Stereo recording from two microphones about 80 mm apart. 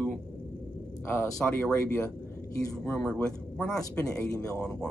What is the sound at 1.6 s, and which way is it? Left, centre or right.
Speech, centre.